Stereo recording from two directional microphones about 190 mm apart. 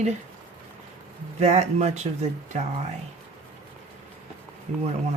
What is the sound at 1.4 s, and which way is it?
Speech, 35° right (ahead or behind).